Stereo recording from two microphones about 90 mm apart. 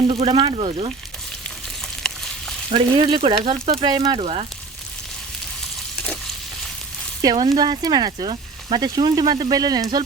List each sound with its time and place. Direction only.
0.1 s speech: 70° right (ahead or behind); by 0.9 s 90° right
2.0 s a sound: 5° left (ahead or behind)
2.7 s speech: 70° right (ahead or behind); by 3.8 s 90° right
3.8 s speech: 50° right (ahead or behind)
7.2 s speech: 45° right (ahead or behind)